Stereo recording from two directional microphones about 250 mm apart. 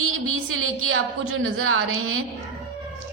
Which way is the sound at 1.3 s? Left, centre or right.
Right.